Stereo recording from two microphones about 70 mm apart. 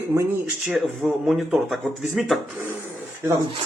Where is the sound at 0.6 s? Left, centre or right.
Centre.